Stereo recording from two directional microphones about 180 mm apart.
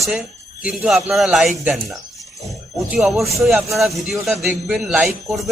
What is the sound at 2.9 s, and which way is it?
Speech, 5° right (ahead or behind).